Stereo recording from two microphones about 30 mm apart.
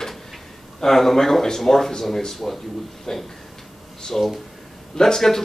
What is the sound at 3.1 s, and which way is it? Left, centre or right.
Speech, centre.